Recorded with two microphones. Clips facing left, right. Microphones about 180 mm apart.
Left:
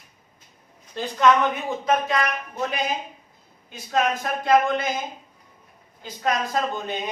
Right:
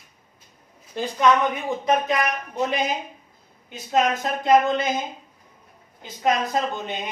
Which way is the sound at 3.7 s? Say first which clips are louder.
Right 2 dB; 20° right (ahead or behind).